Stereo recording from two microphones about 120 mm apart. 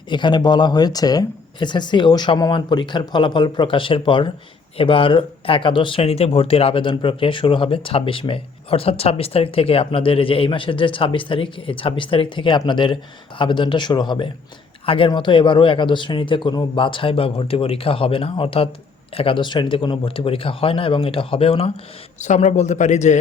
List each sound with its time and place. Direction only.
0.1 s speech: 40° left (ahead or behind)
22.2 s a man's voice: 80° left